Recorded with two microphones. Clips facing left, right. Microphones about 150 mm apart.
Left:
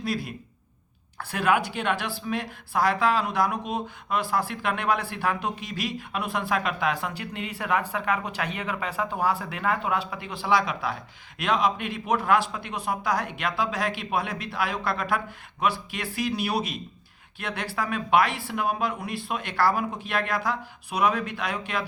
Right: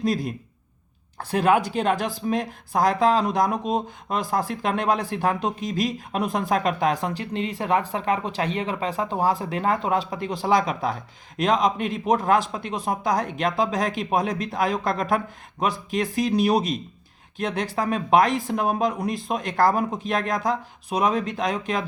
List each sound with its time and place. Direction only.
1.2 s speech: 35° right (ahead or behind)
17.3 s speech: 35° right (ahead or behind)